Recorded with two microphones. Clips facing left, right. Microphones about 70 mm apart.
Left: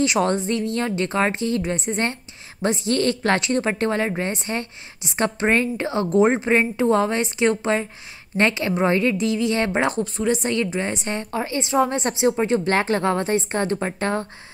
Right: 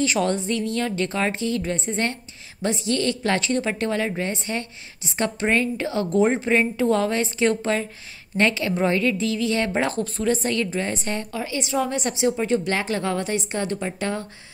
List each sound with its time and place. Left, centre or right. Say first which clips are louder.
0.2 s a woman's voice: left 2 dB; left